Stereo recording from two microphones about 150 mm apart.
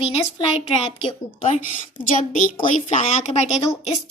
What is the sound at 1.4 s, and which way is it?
A child's voice, 55° left (ahead or behind).